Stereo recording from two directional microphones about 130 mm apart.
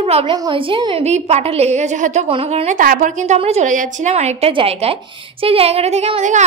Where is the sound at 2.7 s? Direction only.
90° right.